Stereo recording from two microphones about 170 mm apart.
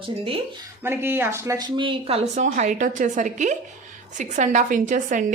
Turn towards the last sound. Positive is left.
turn(degrees=-50)  # may be behind; listen again after turning